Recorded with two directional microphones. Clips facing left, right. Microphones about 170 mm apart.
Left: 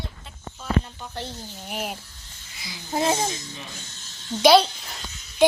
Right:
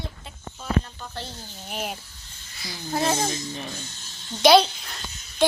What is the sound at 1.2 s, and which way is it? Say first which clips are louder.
Speech: left 4 dB; 15° left (ahead or behind).